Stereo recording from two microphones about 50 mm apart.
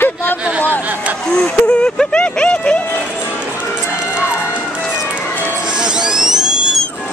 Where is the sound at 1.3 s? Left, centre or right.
Centre.